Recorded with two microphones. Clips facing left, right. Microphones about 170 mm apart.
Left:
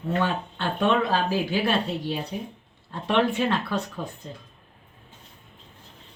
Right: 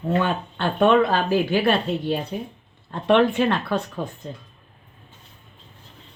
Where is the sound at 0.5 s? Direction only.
50° right (ahead or behind).